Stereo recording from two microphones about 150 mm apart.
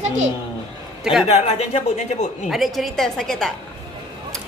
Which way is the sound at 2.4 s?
Centre (ahead or behind).